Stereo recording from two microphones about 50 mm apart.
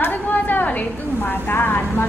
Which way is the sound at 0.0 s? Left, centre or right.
Left.